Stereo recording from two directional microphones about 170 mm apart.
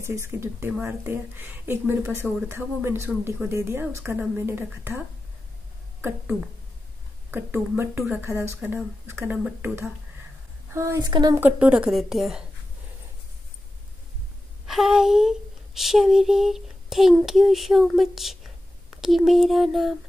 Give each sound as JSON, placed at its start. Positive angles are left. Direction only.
{"t": 0.0, "sound": "a woman's voice", "side_deg": -15}
{"t": 11.3, "sound": "a woman's voice", "side_deg": -10}
{"t": 14.7, "sound": "a sound", "side_deg": 0}
{"t": 18.9, "sound": "a woman's voice", "side_deg": 0}